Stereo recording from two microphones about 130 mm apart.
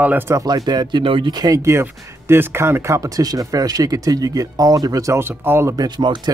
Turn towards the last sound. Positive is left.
turn(degrees=-35)  # may be behind; listen again after turning